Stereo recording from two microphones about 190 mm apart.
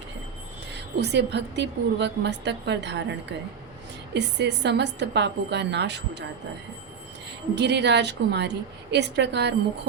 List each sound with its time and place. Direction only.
0.7 s a woman's voice: 60° right (ahead or behind)
4.1 s a woman's voice: 65° right (ahead or behind)
7.5 s a woman's voice: 65° right (ahead or behind)